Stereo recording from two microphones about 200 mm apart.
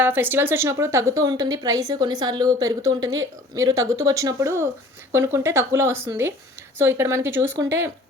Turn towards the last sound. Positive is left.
turn(degrees=-15)  # may be behind; listen again after turning